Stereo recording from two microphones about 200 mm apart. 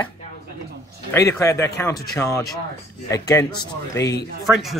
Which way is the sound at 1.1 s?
15° left (ahead or behind).